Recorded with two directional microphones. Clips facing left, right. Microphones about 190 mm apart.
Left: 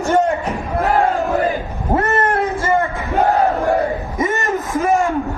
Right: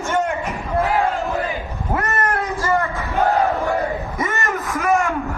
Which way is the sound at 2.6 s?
30° left (ahead or behind).